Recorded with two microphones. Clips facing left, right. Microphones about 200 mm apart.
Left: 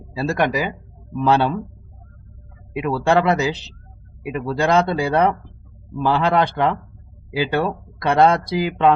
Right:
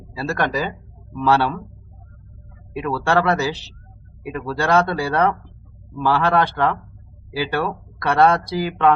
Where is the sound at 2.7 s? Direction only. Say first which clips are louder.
Left 2 dB; 20° left (ahead or behind).